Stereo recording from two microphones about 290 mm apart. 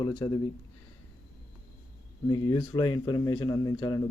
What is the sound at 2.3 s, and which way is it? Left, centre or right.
A man's voice, centre.